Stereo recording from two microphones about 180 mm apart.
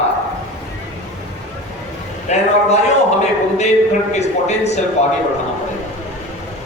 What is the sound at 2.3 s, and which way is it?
A man's voice, 40° left (ahead or behind).